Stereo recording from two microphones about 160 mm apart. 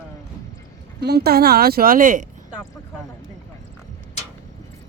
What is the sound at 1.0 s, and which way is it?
Speech, 85° right.